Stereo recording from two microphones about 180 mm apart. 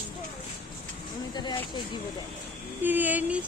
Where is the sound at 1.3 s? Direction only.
25° left (ahead or behind).